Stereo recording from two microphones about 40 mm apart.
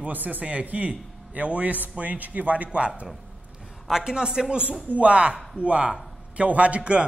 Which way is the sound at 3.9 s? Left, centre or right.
Centre.